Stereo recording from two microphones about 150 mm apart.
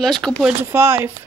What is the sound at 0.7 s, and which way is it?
Speech, 15° right (ahead or behind).